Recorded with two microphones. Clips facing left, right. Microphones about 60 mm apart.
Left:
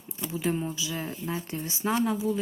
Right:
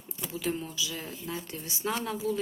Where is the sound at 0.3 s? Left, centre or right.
Left.